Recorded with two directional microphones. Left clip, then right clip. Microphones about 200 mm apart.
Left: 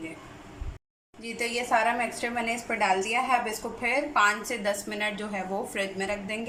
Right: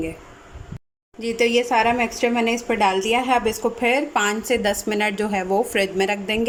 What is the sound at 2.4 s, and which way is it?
A woman's voice, 45° right (ahead or behind).